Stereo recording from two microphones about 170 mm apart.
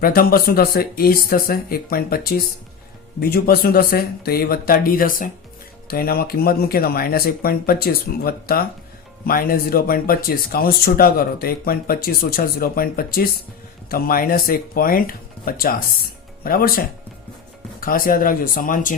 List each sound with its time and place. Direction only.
0.0 s speech: 60° left (ahead or behind)